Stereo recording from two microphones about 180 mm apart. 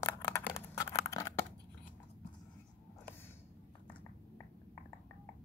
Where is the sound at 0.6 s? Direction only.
15° left (ahead or behind).